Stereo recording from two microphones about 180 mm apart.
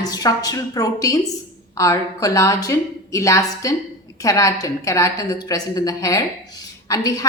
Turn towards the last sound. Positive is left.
turn(degrees=20)  # may be behind; listen again after turning